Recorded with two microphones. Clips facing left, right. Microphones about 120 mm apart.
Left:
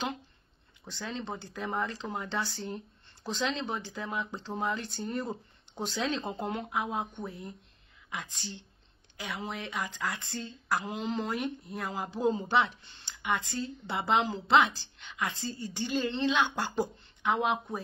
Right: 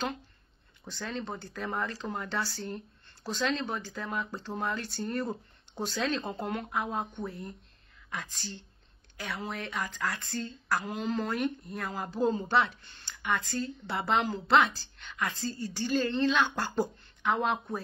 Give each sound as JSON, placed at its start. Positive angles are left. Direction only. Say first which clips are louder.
{"t": 0.8, "sound": "a woman's voice", "louder": "right 1 dB", "side_deg": 15}